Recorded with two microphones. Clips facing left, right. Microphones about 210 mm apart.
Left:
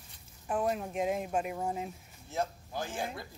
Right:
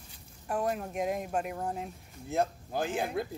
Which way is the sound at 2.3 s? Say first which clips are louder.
Right 5 dB; 60° right (ahead or behind).